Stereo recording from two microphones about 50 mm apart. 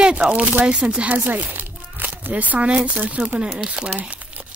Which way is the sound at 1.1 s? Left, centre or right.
Right.